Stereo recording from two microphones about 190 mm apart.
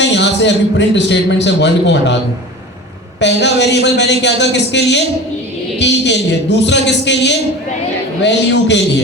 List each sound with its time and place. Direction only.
0.0 s a man's voice: 65° left (ahead or behind)
3.2 s a man's voice: 65° left (ahead or behind)